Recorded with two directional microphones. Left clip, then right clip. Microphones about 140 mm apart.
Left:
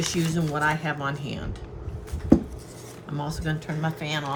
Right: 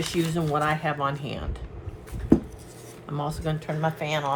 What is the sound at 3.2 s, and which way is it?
Speech, 50° right (ahead or behind).